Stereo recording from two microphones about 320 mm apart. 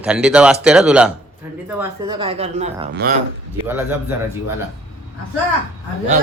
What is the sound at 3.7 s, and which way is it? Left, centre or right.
Speech, centre.